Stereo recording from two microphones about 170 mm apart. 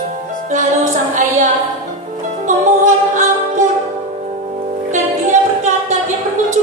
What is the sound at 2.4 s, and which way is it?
Music, 50° right (ahead or behind).